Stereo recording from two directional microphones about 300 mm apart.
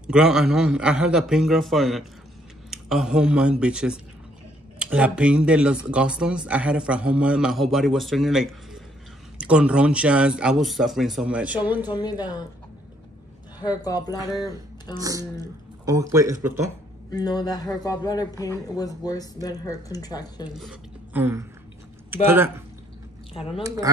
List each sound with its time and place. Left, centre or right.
0.0 s speech: centre
11.8 s a man's voice: centre
13.6 s a man's voice: centre
15.0 s speech: centre
16.3 s speech: right
17.1 s a man's voice: centre
20.5 s speech: centre